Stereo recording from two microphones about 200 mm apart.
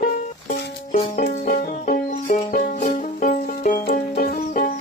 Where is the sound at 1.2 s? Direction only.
45° left (ahead or behind).